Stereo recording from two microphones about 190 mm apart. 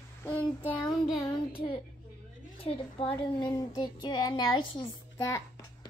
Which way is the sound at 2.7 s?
25° left (ahead or behind).